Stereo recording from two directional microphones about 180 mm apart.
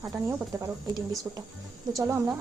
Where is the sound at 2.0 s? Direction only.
15° right (ahead or behind).